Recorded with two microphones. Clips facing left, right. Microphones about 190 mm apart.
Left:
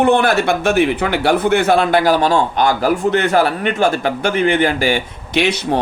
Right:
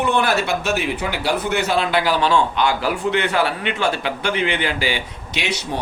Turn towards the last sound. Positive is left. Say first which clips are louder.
# left 9 dB
turn(degrees=55)  # may be behind; listen again after turning